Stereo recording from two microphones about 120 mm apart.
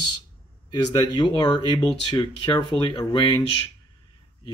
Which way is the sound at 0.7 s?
35° left (ahead or behind).